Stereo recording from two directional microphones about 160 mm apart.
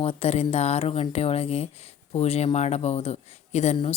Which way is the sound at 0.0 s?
40° left (ahead or behind).